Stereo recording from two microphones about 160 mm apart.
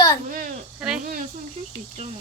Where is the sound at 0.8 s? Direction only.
5° right (ahead or behind).